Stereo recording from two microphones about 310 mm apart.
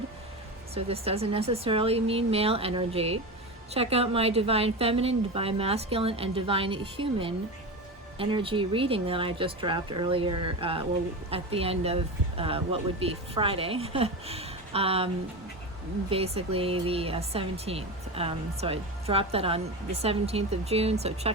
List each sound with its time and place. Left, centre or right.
0.7 s speech: centre